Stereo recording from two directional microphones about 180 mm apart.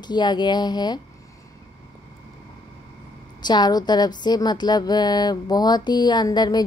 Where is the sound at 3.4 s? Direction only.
25° left (ahead or behind).